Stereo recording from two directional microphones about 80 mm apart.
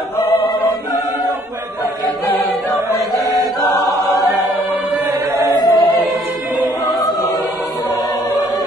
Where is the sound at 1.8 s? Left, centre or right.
Left.